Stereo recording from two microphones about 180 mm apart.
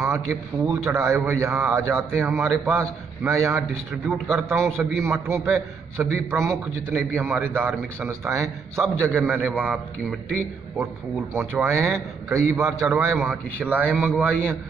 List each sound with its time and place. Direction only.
0.3 s a man's voice: 15° right (ahead or behind)
4.6 s a man's voice: centre (ahead or behind)
5.0 s a man's voice: 15° right (ahead or behind)
11.3 s a man's voice: 15° right (ahead or behind)
12.6 s a man's voice: centre (ahead or behind)
13.0 s a man's voice: 15° right (ahead or behind)